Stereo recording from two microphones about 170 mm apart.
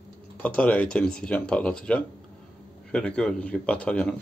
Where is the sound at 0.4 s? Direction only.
10° left (ahead or behind).